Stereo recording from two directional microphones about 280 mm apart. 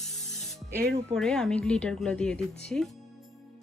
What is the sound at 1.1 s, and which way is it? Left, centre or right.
Speech, centre.